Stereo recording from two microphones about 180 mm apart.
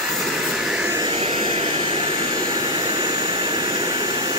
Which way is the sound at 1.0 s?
30° right (ahead or behind).